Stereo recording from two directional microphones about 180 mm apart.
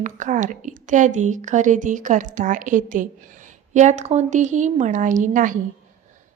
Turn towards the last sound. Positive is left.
turn(degrees=-45)  # may be behind; listen again after turning